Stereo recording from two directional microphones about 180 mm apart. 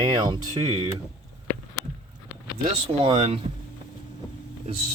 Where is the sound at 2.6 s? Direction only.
25° right (ahead or behind).